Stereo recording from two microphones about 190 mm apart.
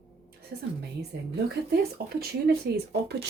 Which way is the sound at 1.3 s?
55° right (ahead or behind).